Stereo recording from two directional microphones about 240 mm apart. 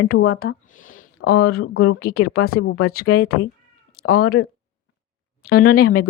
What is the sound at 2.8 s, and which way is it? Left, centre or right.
Speech, left.